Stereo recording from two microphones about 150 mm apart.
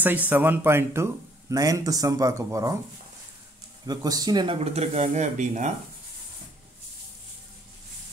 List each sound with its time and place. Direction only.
0.0 s speech: 10° right (ahead or behind)
3.8 s speech: 25° right (ahead or behind)
4.6 s speech: 45° right (ahead or behind)